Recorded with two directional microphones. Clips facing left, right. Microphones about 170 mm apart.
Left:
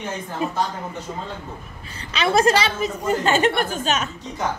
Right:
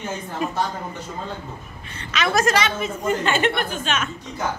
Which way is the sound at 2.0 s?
30° left (ahead or behind).